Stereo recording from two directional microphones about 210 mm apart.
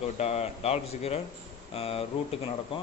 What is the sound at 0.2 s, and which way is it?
A man's voice, 30° left (ahead or behind).